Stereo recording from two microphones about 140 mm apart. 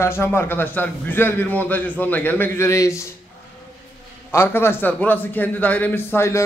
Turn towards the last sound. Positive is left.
turn(degrees=20)  # may be behind; listen again after turning